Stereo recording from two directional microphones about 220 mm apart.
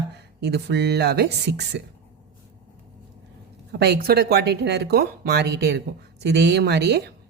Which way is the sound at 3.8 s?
45° right (ahead or behind).